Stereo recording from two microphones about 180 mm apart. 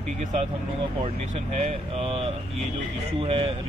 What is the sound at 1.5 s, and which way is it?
Speech, 35° right (ahead or behind).